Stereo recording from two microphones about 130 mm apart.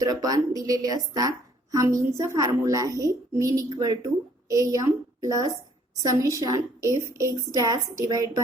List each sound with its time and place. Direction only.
0.0 s a woman's voice: 30° right (ahead or behind)